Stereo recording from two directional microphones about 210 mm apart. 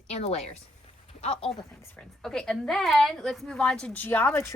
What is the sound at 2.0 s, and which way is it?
A woman's voice, 5° left (ahead or behind).